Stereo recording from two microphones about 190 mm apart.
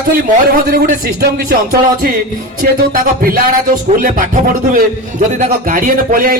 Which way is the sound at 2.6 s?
45° right (ahead or behind).